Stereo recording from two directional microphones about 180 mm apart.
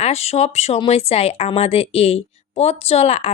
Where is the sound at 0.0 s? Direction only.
35° left (ahead or behind).